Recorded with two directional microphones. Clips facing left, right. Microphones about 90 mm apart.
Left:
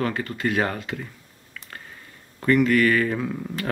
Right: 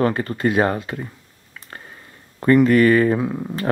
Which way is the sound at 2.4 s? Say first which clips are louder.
Right 5 dB; 30° right (ahead or behind).